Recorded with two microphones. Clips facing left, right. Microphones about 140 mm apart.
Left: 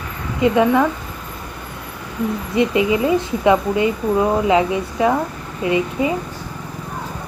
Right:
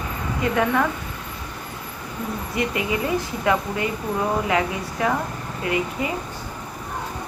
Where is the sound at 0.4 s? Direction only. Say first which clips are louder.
Left 7 dB; 15° left (ahead or behind).